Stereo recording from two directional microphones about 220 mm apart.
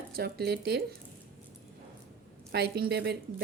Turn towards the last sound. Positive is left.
turn(degrees=-50)  # may be behind; listen again after turning